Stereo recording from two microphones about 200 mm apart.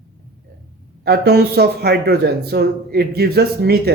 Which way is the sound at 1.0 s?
55° right (ahead or behind).